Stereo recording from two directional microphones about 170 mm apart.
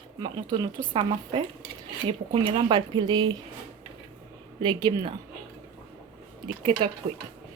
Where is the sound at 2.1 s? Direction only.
30° right (ahead or behind).